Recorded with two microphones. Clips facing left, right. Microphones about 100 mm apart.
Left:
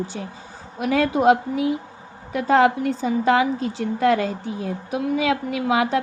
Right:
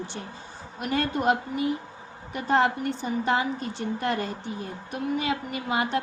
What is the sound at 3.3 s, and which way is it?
Speech, 90° left.